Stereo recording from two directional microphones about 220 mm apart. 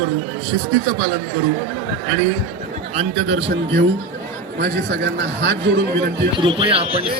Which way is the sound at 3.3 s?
55° right (ahead or behind).